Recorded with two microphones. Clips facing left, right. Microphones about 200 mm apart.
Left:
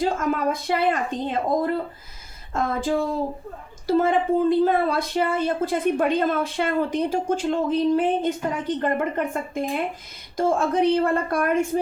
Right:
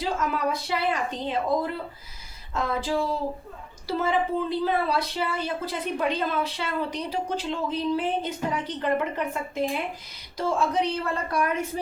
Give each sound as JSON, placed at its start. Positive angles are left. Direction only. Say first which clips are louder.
{"t": 0.0, "sound": "a woman's voice", "louder": "left 4 dB", "side_deg": 50}